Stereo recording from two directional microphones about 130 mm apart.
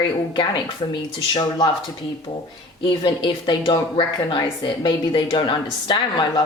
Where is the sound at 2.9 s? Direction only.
40° left (ahead or behind).